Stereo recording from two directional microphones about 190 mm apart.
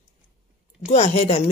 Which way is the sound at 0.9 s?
40° left (ahead or behind).